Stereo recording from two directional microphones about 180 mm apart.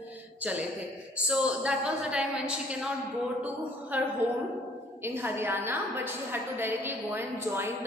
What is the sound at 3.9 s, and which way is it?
A woman's voice, 10° right (ahead or behind).